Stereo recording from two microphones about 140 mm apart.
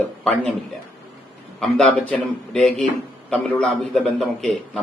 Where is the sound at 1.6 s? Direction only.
10° left (ahead or behind).